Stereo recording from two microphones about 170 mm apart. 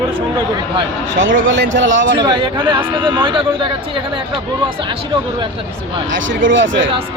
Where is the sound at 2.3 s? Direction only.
30° right (ahead or behind).